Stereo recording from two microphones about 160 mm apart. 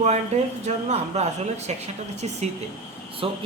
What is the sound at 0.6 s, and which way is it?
Speech, 45° right (ahead or behind).